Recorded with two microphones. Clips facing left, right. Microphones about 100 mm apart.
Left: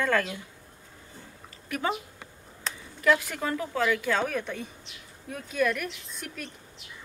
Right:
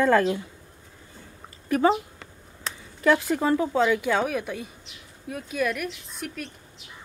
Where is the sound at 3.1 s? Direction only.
30° right (ahead or behind).